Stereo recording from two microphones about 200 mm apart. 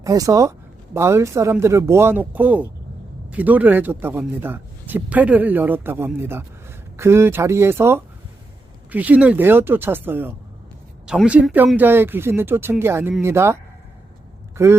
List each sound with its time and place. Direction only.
0.0 s a man's voice: 15° right (ahead or behind)